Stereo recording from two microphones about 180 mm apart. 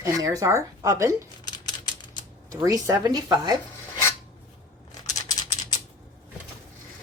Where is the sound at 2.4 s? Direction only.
20° right (ahead or behind).